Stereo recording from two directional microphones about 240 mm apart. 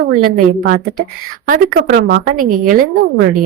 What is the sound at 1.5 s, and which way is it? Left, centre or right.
A woman's voice, right.